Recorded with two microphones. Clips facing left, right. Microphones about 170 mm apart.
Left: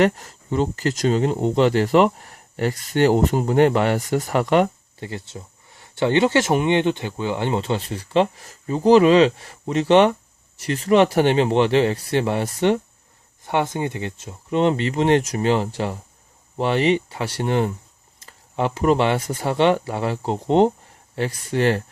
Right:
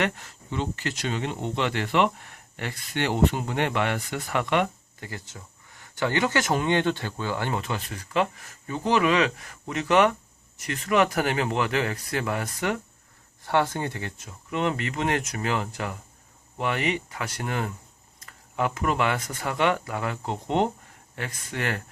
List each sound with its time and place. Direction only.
0.0 s speech: 40° left (ahead or behind)
5.0 s speech: 25° left (ahead or behind)